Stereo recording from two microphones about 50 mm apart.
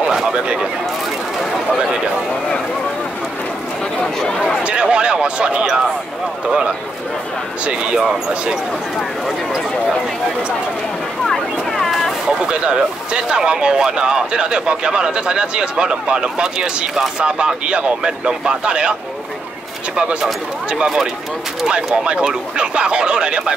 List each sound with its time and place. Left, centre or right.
0.1 s speech: centre
1.7 s speech: centre
4.0 s speech: centre
4.6 s speech: right
7.6 s speech: centre
11.2 s vehicle: centre
12.3 s speech: centre
20.0 s speech: centre